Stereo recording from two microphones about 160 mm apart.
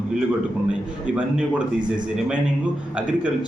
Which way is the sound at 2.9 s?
5° right (ahead or behind).